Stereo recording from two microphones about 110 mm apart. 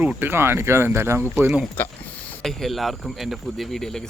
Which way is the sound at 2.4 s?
Centre (ahead or behind).